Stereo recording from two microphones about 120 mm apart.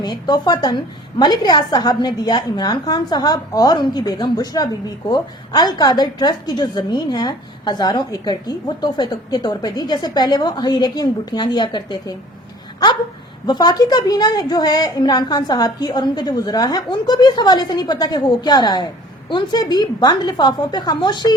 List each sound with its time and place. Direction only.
0.0 s a woman's voice: 35° left (ahead or behind)
13.5 s a woman's voice: 35° left (ahead or behind)